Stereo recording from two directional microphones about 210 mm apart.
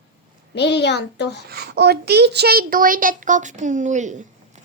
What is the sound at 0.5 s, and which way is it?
Speech, 55° left (ahead or behind).